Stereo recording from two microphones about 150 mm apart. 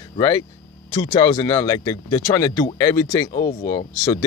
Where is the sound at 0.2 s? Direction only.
25° left (ahead or behind).